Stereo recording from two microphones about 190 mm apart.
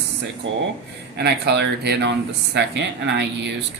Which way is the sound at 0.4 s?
75° right (ahead or behind).